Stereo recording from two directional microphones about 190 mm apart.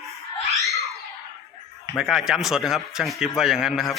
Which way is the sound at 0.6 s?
15° left (ahead or behind).